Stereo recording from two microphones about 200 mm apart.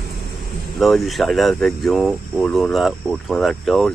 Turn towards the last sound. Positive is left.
turn(degrees=0)  # may be behind; listen again after turning